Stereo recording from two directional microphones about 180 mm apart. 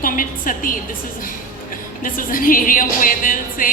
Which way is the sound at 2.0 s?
50° left (ahead or behind).